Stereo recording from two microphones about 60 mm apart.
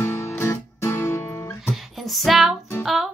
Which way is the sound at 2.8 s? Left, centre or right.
Left.